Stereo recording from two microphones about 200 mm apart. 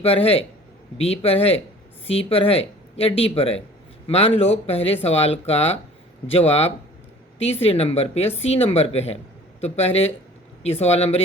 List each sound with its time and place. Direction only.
0.0 s speech: 30° left (ahead or behind)